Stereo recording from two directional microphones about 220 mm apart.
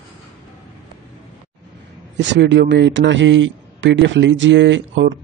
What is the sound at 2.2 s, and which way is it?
A man's voice, 55° right (ahead or behind).